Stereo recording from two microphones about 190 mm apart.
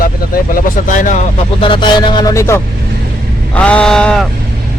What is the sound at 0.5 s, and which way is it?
Speech, 45° left (ahead or behind).